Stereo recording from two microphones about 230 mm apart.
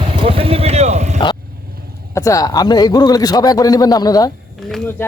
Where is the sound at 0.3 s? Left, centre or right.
Right.